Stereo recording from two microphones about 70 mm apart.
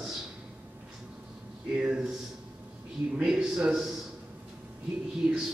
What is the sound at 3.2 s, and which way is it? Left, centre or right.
Speech, centre.